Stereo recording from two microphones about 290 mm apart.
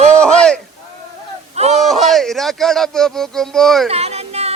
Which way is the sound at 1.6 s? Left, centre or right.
Right.